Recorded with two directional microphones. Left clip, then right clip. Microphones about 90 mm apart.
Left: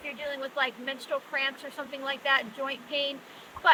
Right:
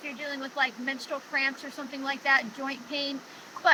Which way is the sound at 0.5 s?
90° left.